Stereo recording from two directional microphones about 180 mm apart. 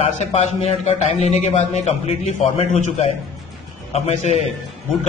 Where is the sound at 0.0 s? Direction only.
35° left (ahead or behind).